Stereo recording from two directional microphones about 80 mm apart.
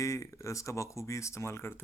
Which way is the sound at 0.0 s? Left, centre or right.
Left.